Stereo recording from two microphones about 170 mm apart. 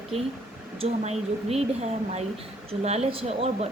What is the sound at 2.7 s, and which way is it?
Speech, 35° right (ahead or behind).